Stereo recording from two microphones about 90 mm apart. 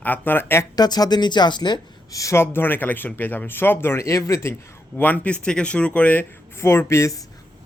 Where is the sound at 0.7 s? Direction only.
50° left (ahead or behind).